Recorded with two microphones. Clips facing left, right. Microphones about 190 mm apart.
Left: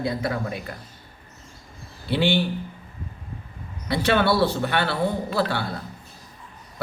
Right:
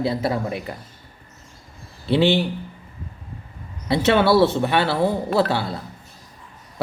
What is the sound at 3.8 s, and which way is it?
Speech, 20° right (ahead or behind).